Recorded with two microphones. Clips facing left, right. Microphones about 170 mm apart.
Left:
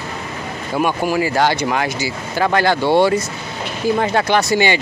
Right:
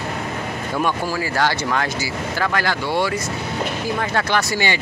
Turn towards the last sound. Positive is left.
turn(degrees=20)  # may be behind; listen again after turning